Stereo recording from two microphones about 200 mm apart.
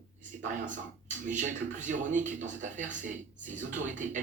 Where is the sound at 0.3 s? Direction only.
40° right (ahead or behind).